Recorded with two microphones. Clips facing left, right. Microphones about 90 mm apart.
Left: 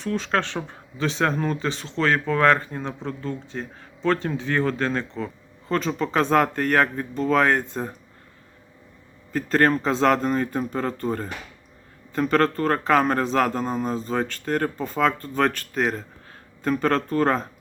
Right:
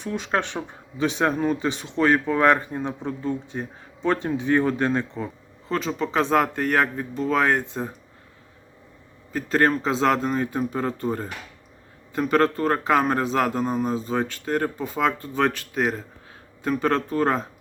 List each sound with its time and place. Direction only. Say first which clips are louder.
0.0 s speech: left 1 dB; 15° right (ahead or behind)
5.6 s speech: left 1 dB; 5° right (ahead or behind)
9.3 s speech: left 1 dB; 5° right (ahead or behind)